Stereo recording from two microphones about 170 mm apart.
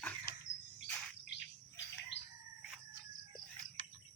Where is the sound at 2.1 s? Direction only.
90° left.